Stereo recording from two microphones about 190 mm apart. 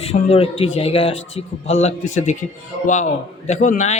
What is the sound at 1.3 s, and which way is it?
Speech, 90° left.